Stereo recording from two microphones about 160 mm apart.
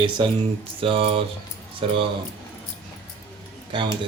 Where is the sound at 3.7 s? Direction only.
30° right (ahead or behind).